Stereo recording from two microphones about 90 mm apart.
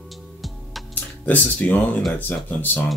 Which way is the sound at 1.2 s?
20° left (ahead or behind).